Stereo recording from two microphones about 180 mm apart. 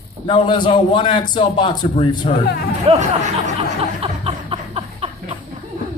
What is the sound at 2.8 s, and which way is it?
Speech, 35° right (ahead or behind).